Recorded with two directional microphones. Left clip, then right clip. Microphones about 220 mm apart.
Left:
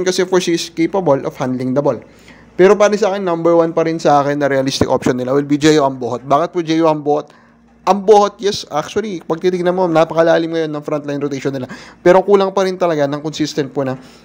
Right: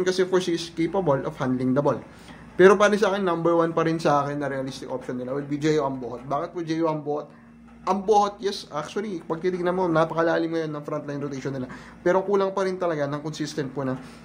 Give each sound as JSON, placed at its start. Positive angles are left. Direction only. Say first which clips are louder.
{"t": 0.0, "sound": "a man's voice", "louder": "left 8 dB", "side_deg": 40}